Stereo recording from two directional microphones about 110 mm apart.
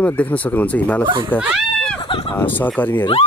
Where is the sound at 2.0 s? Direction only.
50° left (ahead or behind).